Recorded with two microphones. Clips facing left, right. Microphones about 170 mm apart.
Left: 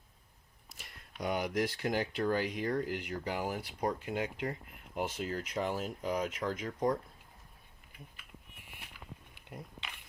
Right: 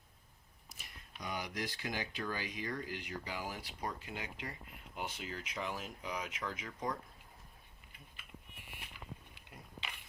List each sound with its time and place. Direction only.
1.2 s speech: 60° left (ahead or behind); by 6.9 s 40° left (ahead or behind)